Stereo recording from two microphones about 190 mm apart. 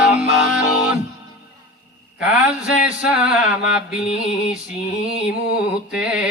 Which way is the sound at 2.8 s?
5° right (ahead or behind).